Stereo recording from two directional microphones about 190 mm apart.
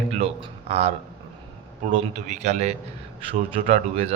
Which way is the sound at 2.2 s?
40° right (ahead or behind).